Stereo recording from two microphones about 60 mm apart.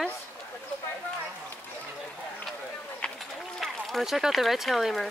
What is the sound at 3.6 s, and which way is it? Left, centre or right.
Speech, centre.